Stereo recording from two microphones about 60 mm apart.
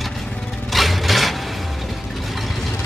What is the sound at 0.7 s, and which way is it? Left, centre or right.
Music, centre.